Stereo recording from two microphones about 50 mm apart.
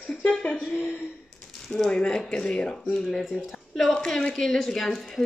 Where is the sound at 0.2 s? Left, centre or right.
Centre.